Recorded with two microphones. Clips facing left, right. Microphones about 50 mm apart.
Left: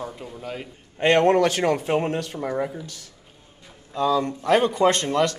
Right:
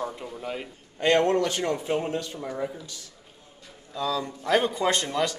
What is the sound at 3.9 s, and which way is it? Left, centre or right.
Speech, left.